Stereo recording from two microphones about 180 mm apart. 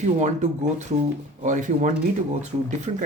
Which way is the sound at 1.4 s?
45° right (ahead or behind).